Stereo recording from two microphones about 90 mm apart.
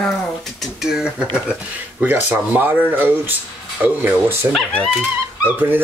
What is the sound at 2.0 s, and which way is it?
Speech, 20° right (ahead or behind).